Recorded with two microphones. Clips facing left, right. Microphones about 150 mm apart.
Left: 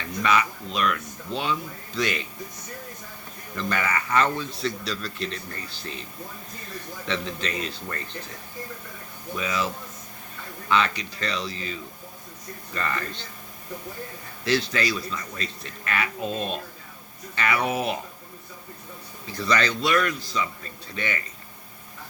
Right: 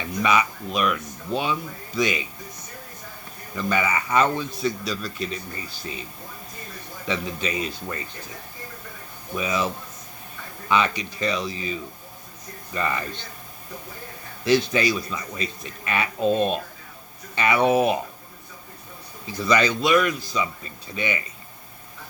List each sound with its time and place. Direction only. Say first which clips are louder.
0.0 s speech: right 2 dB; 15° right (ahead or behind)
1.3 s speech: right 4 dB; 55° right (ahead or behind)
2.0 s speech: right 3 dB; 10° right (ahead or behind)
3.5 s speech: right 3 dB; 10° right (ahead or behind)
7.1 s speech: right 2 dB; 10° right (ahead or behind)
9.3 s speech: right 3 dB; 20° right (ahead or behind)
10.7 s speech: right 1 dB; 15° right (ahead or behind)
14.7 s speech: right 4 dB; 15° right (ahead or behind)
19.3 s speech: right 3 dB; 15° right (ahead or behind)